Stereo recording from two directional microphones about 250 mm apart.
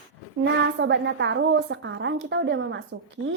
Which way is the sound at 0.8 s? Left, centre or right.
Right.